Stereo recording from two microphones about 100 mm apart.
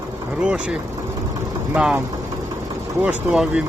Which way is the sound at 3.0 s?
5° right (ahead or behind).